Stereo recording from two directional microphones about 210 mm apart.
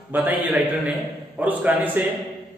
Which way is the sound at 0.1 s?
10° right (ahead or behind).